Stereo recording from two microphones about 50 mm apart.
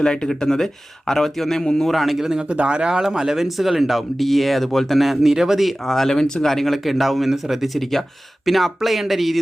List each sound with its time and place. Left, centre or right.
0.0 s speech: centre
2.5 s speech: right; by 9.4 s centre